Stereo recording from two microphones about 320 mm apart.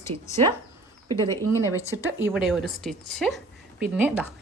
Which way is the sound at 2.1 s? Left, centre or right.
Centre.